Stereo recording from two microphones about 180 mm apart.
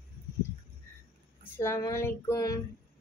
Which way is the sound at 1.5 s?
15° left (ahead or behind).